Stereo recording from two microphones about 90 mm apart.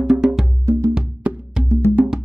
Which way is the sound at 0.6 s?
35° right (ahead or behind).